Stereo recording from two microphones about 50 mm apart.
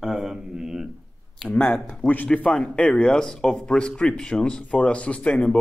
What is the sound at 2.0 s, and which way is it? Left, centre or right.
Speech, left.